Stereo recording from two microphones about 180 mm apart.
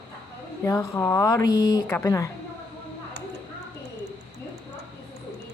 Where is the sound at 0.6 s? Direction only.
15° left (ahead or behind).